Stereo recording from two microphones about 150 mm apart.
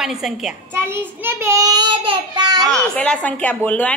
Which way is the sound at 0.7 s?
15° right (ahead or behind).